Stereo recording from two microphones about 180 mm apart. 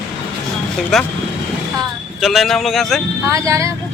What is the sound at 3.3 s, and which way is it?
Speech, 15° right (ahead or behind).